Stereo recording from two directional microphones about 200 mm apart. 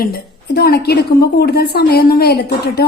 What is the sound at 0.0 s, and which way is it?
A woman's voice, 50° left (ahead or behind).